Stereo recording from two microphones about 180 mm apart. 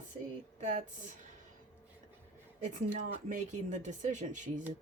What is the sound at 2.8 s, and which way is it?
Speech, 40° right (ahead or behind).